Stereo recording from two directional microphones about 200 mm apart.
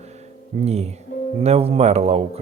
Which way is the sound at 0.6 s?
30° right (ahead or behind).